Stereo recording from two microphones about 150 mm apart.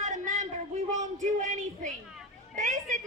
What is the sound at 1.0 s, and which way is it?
Speech, 55° right (ahead or behind).